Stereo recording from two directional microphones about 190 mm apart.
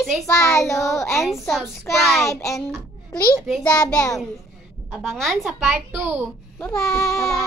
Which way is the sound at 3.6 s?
20° left (ahead or behind).